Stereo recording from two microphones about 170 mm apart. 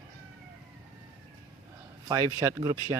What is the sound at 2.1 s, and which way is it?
Speech, 20° right (ahead or behind).